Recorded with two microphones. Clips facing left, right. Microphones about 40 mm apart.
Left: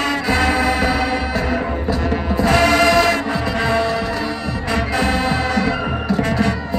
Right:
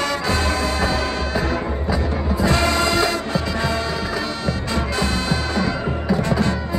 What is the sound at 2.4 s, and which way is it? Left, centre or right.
Music, left.